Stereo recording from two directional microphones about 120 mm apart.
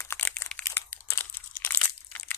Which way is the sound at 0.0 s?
25° left (ahead or behind).